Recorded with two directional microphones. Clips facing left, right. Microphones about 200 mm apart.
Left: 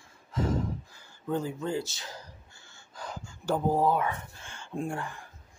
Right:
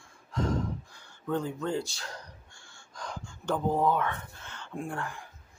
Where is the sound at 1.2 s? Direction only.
5° left (ahead or behind).